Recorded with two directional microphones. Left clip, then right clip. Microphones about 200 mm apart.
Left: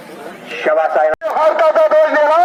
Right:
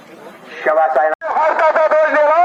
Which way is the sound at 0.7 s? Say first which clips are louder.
Even; 55° left (ahead or behind).